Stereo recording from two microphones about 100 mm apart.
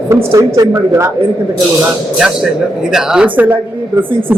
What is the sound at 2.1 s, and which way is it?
A man's voice, 5° right (ahead or behind).